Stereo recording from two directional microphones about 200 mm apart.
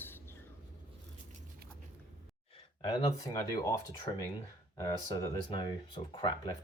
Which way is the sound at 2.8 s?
20° left (ahead or behind).